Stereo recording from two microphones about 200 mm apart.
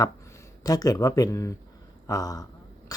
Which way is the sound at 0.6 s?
15° left (ahead or behind).